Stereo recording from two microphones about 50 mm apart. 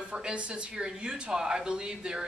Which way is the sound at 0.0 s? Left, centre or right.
Centre.